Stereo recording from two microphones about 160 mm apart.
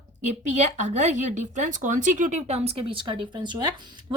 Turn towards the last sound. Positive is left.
turn(degrees=-25)  # may be behind; listen again after turning